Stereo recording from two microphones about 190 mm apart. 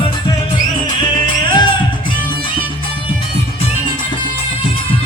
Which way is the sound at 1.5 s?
25° left (ahead or behind).